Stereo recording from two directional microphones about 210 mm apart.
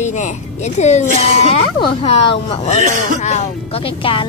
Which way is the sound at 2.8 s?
35° right (ahead or behind).